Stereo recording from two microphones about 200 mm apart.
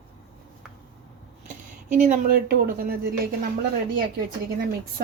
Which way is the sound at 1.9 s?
40° right (ahead or behind).